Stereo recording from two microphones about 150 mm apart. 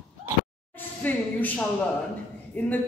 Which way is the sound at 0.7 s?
10° left (ahead or behind).